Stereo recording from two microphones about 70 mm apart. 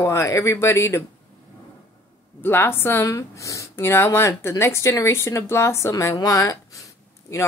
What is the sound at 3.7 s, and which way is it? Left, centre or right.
Speech, left.